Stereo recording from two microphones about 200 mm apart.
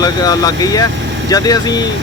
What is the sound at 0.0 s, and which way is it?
Speech, 20° left (ahead or behind).